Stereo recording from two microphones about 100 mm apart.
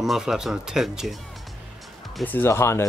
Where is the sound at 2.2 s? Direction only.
25° left (ahead or behind).